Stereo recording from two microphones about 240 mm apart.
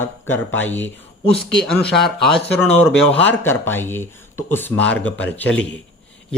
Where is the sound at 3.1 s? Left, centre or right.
Centre.